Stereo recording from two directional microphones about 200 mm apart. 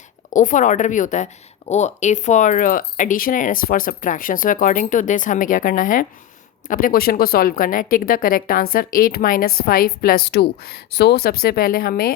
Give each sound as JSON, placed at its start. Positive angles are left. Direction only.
{"t": 0.3, "sound": "a woman's voice", "side_deg": 40}